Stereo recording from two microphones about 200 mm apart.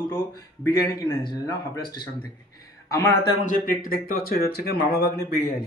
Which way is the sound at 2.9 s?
15° left (ahead or behind).